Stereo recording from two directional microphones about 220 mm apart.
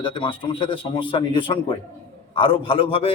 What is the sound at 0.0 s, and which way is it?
A man's voice, 20° left (ahead or behind).